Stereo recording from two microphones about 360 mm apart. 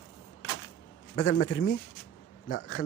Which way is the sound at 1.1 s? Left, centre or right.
Left.